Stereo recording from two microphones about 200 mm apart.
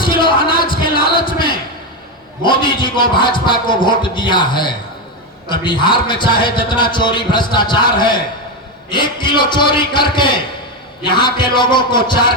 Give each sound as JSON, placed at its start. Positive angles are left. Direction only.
{"t": 0.0, "sound": "music", "side_deg": 25}
{"t": 2.4, "sound": "speech", "side_deg": 25}